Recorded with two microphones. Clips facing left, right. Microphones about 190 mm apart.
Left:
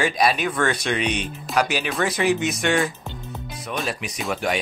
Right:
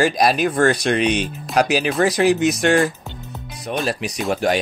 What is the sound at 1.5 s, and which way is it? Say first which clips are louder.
Speech: right 5 dB; 40° right (ahead or behind).